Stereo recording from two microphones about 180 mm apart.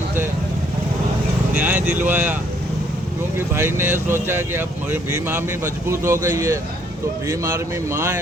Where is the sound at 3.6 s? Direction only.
15° right (ahead or behind).